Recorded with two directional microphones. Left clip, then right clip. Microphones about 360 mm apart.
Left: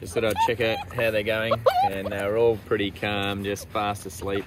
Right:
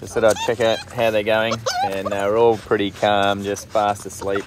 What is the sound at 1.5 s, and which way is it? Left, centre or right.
Speech, centre.